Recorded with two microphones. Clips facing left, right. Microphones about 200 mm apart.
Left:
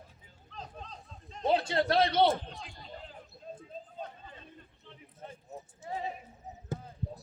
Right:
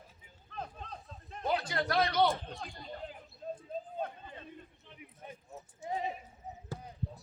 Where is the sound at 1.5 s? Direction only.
25° left (ahead or behind).